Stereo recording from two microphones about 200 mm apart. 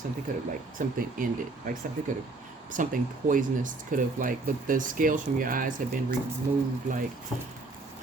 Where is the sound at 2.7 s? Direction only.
40° right (ahead or behind).